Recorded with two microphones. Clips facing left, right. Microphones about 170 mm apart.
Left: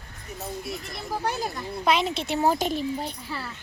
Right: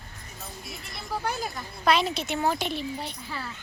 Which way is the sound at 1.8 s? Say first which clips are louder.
Even; 20° left (ahead or behind).